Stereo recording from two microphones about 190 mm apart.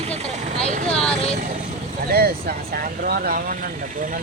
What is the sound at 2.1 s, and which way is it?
Speech, 55° right (ahead or behind).